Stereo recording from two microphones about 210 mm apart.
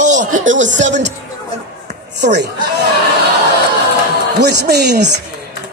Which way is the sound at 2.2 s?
55° right (ahead or behind).